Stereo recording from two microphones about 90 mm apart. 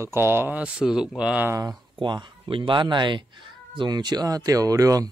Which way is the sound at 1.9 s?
60° right (ahead or behind).